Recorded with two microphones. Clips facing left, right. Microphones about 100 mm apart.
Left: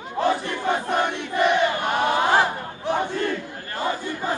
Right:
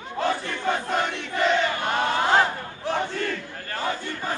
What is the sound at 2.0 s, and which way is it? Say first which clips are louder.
Battle cry: left 1 dB; 15° left (ahead or behind).